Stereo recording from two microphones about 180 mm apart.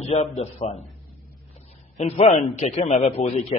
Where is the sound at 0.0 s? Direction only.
35° left (ahead or behind).